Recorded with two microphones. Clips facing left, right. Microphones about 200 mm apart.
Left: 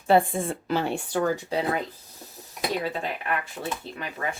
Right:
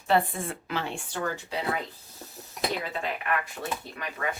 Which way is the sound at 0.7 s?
45° left (ahead or behind).